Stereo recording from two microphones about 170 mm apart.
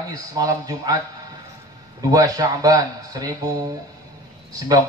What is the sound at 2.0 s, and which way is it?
A man's voice, 20° right (ahead or behind).